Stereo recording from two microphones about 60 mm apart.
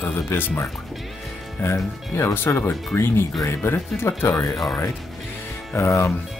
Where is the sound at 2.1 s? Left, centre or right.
Left.